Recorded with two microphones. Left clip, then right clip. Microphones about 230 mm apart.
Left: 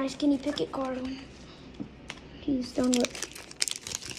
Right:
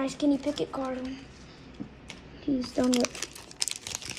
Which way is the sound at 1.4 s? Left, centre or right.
Left.